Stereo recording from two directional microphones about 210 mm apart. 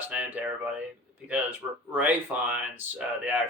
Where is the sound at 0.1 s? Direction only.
10° right (ahead or behind).